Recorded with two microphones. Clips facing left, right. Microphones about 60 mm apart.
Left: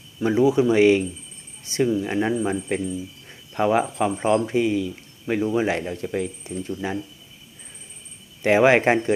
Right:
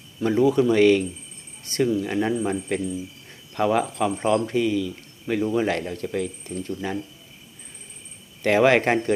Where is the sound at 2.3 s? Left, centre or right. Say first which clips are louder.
Left 1 dB; centre.